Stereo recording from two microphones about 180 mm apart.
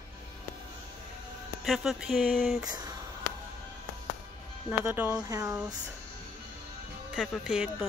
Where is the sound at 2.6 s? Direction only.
20° right (ahead or behind).